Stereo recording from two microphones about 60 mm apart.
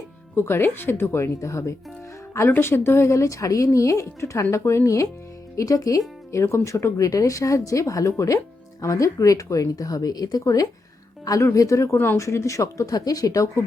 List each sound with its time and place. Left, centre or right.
0.3 s speech: left
2.5 s speech: left
3.1 s speech: left
5.5 s speech: left
6.3 s speech: left
11.5 s speech: left